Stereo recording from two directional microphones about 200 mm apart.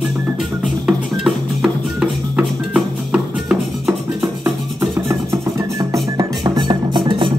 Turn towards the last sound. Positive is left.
turn(degrees=-25)  # may be behind; listen again after turning